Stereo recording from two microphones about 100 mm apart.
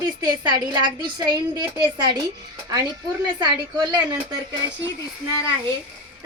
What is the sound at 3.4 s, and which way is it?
Speech, 45° right (ahead or behind).